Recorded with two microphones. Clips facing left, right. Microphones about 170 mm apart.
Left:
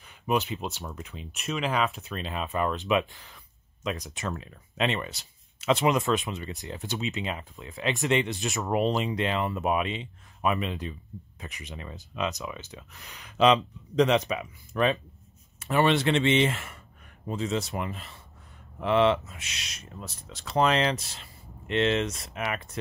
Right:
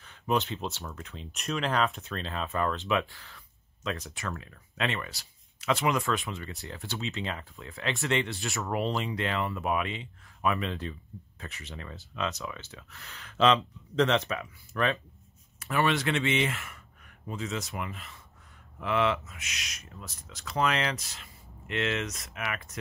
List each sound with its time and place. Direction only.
0.0 s speech: 10° left (ahead or behind); by 22.8 s 30° left (ahead or behind)